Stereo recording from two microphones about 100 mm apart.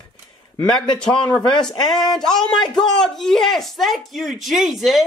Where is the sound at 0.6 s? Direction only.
50° left (ahead or behind).